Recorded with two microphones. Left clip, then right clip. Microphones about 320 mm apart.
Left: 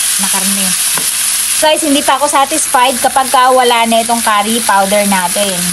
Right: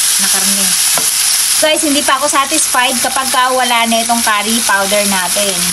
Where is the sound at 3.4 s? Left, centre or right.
Left.